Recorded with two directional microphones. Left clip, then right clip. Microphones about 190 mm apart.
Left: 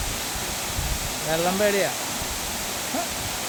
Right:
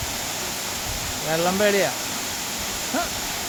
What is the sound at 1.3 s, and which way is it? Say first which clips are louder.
Speech: right 2 dB; 15° right (ahead or behind).